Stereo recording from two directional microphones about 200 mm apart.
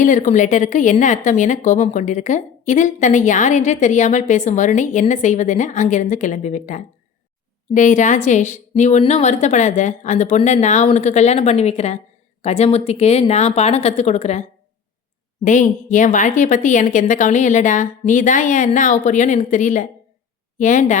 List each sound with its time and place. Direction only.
0.0 s speech: 40° left (ahead or behind)
15.4 s speech: 40° left (ahead or behind)